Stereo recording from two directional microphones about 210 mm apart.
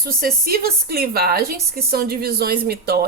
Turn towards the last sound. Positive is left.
turn(degrees=-50)  # may be behind; listen again after turning